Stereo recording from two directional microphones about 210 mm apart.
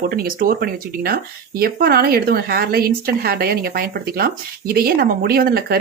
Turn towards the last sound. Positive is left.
turn(degrees=-45)  # may be behind; listen again after turning